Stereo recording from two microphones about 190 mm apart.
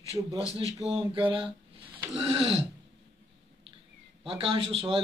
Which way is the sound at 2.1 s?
30° right (ahead or behind).